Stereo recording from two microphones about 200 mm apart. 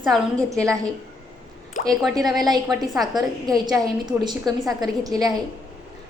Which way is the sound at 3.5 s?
20° right (ahead or behind).